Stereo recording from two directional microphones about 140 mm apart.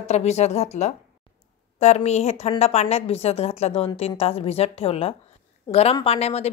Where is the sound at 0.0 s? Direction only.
50° left (ahead or behind).